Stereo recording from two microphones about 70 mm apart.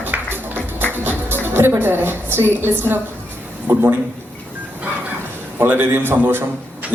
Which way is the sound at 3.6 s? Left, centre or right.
Right.